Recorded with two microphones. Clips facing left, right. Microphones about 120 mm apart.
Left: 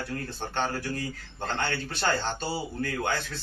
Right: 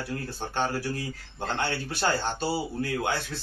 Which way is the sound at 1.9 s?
10° right (ahead or behind).